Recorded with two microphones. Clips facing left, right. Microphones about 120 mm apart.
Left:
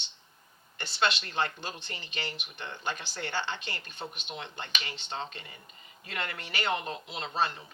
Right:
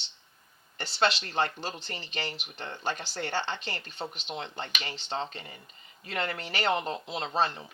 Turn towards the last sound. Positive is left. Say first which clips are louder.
# right 3 dB
turn(degrees=-35)  # may be behind; listen again after turning